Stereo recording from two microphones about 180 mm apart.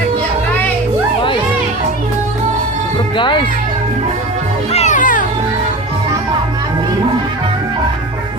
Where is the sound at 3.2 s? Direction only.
25° left (ahead or behind).